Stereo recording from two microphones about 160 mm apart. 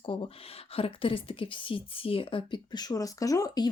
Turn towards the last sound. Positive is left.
turn(degrees=25)  # may be behind; listen again after turning